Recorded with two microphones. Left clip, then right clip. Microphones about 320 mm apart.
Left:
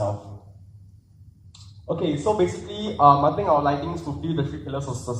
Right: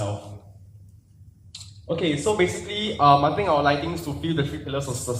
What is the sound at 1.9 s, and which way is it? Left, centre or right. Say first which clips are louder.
Speech: even; centre.